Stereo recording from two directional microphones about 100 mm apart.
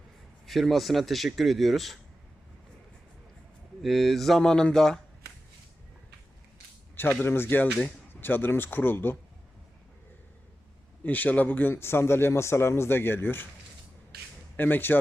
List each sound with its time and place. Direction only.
0.4 s speech: centre (ahead or behind)
3.8 s speech: centre (ahead or behind)
6.9 s a man's voice: 20° left (ahead or behind)
11.0 s a man's voice: 15° left (ahead or behind)
14.5 s speech: 20° left (ahead or behind)